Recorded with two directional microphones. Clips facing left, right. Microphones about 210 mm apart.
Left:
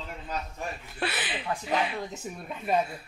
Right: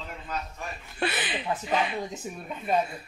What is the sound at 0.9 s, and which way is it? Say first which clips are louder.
Speech: right 4 dB; 5° left (ahead or behind).